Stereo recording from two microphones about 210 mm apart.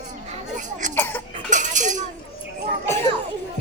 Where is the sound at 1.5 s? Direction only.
35° right (ahead or behind).